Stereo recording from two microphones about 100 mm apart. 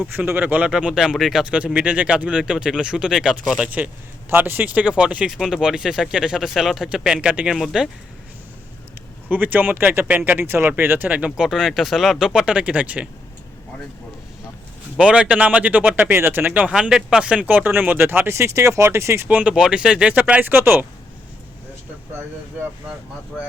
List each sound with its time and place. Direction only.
0.1 s speech: 20° right (ahead or behind)
4.3 s speech: 20° right (ahead or behind); by 7.9 s centre (ahead or behind)
9.3 s speech: 20° right (ahead or behind)
11.3 s speech: 5° right (ahead or behind)
14.9 s speech: 10° right (ahead or behind)